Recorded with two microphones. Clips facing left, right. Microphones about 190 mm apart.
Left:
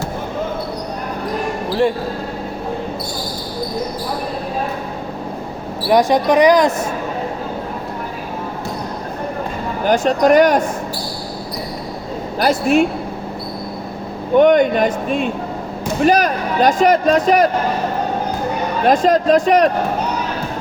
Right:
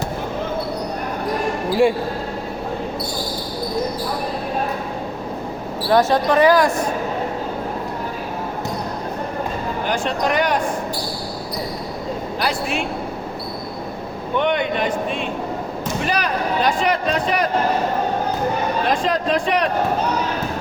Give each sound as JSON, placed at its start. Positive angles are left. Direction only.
{"t": 5.9, "sound": "speech", "side_deg": 15}
{"t": 9.8, "sound": "a man's voice", "side_deg": 45}
{"t": 12.4, "sound": "a man's voice", "side_deg": 45}
{"t": 14.3, "sound": "a man's voice", "side_deg": 45}
{"t": 18.9, "sound": "a man's voice", "side_deg": 45}